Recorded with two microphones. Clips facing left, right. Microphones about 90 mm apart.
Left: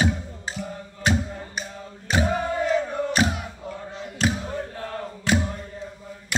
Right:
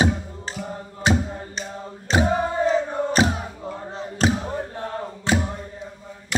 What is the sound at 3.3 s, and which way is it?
Music, 30° right (ahead or behind).